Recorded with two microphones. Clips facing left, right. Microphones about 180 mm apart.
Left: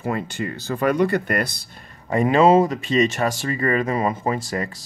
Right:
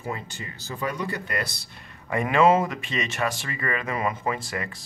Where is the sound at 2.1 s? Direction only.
35° left (ahead or behind).